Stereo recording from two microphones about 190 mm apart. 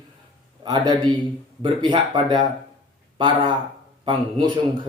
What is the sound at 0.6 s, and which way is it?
A man's voice, 20° right (ahead or behind).